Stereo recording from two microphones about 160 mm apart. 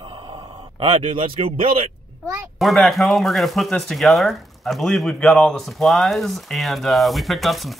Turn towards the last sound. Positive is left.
turn(degrees=0)  # may be behind; listen again after turning